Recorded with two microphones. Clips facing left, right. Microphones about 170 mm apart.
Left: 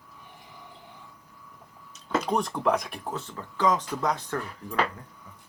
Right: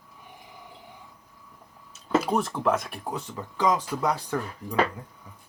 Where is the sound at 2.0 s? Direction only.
5° right (ahead or behind).